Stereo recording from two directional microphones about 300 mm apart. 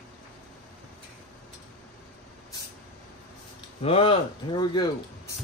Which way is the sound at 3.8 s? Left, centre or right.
Centre.